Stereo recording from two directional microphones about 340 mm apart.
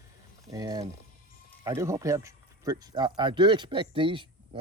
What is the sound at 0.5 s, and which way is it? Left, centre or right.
Speech, centre.